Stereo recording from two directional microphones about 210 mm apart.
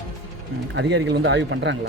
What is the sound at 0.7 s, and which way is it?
Speech, 55° right (ahead or behind).